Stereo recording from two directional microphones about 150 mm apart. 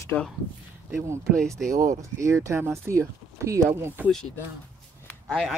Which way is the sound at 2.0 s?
20° right (ahead or behind).